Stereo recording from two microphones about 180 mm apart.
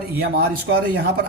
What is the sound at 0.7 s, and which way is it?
Speech, 80° right.